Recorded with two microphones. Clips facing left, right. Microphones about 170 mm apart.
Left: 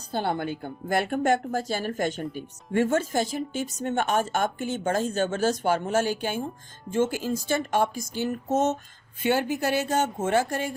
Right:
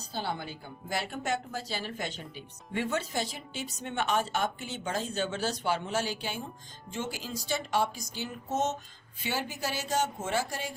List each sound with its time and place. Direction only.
0.1 s a woman's voice: 55° left (ahead or behind)